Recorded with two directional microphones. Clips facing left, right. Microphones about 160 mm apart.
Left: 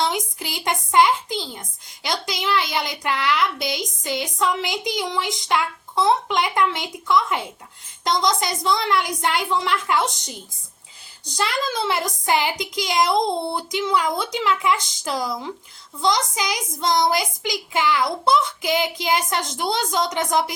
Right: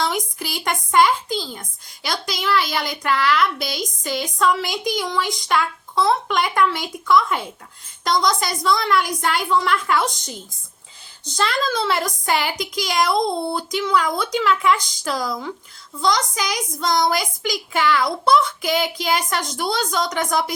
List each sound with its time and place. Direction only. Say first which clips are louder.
0.0 s a woman's voice: even; 20° left (ahead or behind)